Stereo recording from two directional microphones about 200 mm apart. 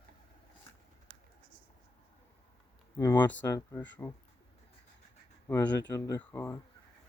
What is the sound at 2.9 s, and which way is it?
Speech, 15° left (ahead or behind).